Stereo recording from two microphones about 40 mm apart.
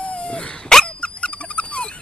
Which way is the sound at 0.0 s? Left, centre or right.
Left.